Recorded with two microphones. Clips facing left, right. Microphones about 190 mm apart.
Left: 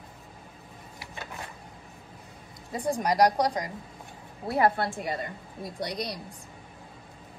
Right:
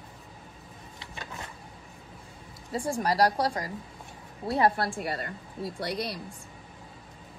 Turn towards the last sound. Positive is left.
turn(degrees=20)  # may be behind; listen again after turning